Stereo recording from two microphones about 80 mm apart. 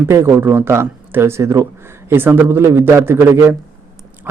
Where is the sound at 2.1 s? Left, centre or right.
Right.